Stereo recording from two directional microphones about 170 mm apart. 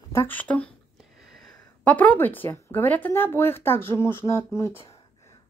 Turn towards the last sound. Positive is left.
turn(degrees=15)  # may be behind; listen again after turning